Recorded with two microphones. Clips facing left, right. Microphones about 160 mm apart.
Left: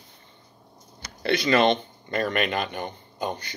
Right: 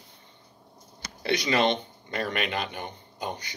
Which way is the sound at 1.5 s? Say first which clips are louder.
Left 5 dB; 50° left (ahead or behind).